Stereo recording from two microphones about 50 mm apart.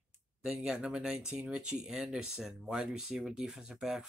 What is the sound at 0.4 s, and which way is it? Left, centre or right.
Speech, centre.